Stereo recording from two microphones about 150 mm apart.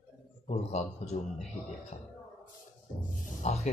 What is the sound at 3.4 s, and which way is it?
Speech, 50° left (ahead or behind).